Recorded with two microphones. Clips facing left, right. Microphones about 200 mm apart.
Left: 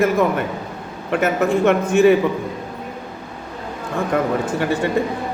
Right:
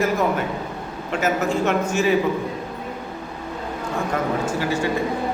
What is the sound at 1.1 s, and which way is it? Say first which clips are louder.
Speech: left 4 dB; 60° left (ahead or behind).